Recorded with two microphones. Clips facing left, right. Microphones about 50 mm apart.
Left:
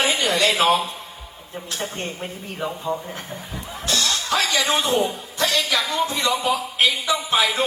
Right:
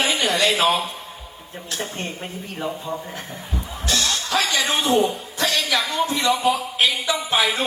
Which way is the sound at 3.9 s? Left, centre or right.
Right.